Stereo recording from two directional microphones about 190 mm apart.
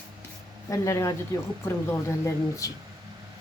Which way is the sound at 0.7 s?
15° left (ahead or behind).